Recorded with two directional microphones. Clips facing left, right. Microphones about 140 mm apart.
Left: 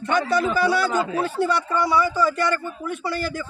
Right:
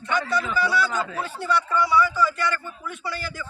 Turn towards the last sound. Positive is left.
turn(degrees=55)  # may be behind; listen again after turning